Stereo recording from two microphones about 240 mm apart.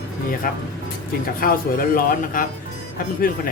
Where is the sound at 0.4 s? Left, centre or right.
Left.